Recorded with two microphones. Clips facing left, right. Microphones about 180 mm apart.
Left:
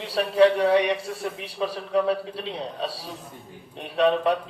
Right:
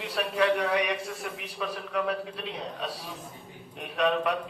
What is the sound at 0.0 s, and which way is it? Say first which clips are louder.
A man's voice: left 8 dB; 30° left (ahead or behind).